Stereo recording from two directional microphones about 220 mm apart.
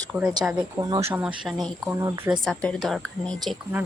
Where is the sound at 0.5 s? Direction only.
20° right (ahead or behind).